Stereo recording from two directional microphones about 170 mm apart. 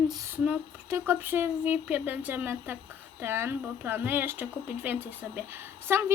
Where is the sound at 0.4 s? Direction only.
10° right (ahead or behind).